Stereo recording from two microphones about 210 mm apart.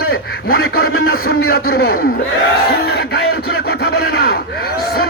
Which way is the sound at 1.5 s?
50° left (ahead or behind).